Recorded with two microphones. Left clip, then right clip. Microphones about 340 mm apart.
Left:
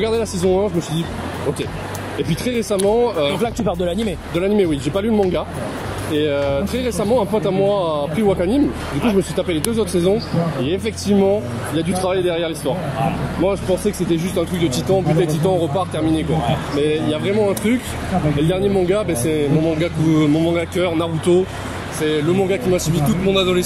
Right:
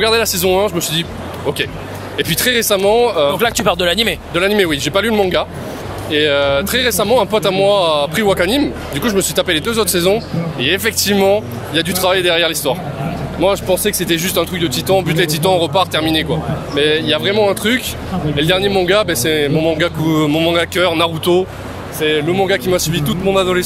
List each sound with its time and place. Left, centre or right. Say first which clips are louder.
0.0 s speech: right 5 dB; right
2.2 s speech: right 8 dB; right